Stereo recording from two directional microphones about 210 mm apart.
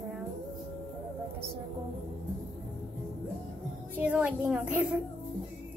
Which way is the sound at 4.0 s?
5° right (ahead or behind).